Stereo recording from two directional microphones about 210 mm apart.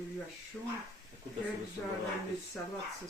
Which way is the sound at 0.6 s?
5° left (ahead or behind).